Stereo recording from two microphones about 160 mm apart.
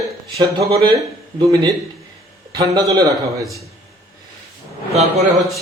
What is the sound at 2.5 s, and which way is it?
Speech, 25° right (ahead or behind).